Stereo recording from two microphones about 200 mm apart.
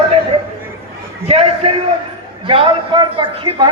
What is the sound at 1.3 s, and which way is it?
A man's voice, 30° right (ahead or behind).